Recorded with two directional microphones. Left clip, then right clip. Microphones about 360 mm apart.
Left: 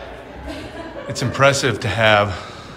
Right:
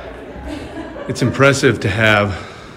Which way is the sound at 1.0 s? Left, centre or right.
Centre.